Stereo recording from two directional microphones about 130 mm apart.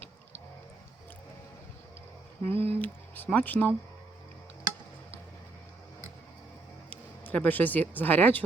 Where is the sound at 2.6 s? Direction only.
50° right (ahead or behind).